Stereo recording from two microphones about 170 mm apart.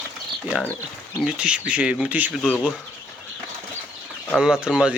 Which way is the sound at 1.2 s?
5° right (ahead or behind).